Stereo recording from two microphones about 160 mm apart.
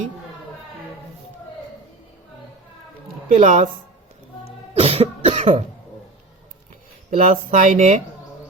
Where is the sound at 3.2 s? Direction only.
55° right (ahead or behind).